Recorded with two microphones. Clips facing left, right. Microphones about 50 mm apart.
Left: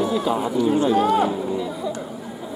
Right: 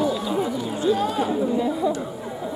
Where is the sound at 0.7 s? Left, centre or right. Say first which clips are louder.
Left 2 dB; left.